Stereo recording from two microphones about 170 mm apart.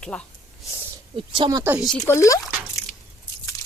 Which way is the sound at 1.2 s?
30° right (ahead or behind).